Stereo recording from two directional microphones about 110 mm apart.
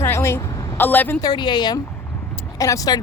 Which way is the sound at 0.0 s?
25° left (ahead or behind).